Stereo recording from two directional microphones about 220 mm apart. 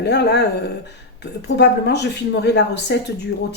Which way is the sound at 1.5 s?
50° left (ahead or behind).